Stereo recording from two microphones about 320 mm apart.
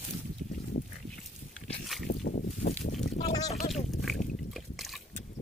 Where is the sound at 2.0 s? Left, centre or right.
Left.